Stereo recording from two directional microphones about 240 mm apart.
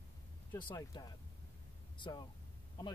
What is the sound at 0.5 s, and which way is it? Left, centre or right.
Speech, centre.